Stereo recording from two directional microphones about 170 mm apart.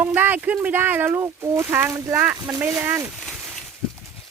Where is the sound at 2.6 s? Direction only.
10° right (ahead or behind).